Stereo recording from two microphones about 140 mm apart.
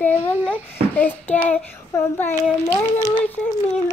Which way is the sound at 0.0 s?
15° left (ahead or behind).